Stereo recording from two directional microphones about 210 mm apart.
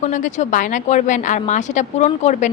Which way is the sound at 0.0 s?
35° left (ahead or behind).